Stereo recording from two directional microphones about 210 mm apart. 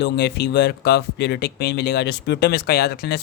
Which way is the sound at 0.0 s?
50° left (ahead or behind).